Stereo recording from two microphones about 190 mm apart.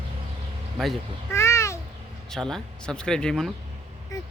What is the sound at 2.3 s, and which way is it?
Speech, centre (ahead or behind).